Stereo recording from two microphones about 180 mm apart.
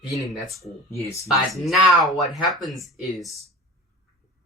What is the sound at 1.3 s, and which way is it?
Speech, centre (ahead or behind).